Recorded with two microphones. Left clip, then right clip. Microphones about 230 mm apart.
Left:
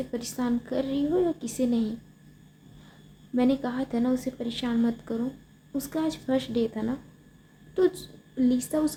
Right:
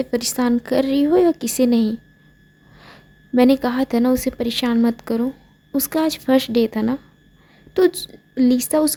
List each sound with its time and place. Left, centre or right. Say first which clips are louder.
0.0 s a woman's voice: right 11 dB; right
3.3 s a woman's voice: right 10 dB; right